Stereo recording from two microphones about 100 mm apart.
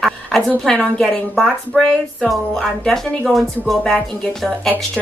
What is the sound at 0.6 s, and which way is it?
A woman's voice, 5° left (ahead or behind).